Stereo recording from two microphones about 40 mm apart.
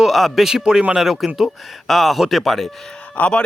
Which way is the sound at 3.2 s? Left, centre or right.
Left.